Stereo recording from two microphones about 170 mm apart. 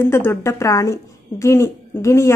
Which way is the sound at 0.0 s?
15° left (ahead or behind).